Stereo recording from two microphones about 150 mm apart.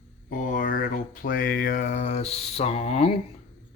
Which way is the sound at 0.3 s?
60° left (ahead or behind).